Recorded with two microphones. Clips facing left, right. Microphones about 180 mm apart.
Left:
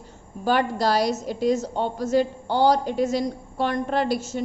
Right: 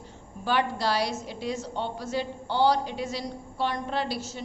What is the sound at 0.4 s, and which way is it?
A woman's voice, 45° left (ahead or behind).